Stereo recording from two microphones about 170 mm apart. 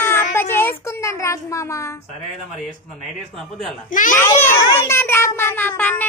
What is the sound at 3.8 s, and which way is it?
Speech, 50° left (ahead or behind).